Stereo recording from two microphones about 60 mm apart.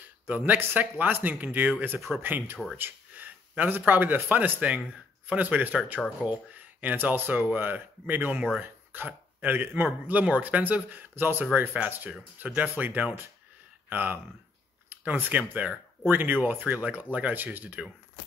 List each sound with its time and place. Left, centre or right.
0.3 s speech: right
2.0 s speech: centre
2.2 s speech: right